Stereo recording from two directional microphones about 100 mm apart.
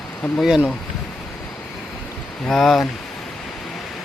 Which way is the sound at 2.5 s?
5° left (ahead or behind).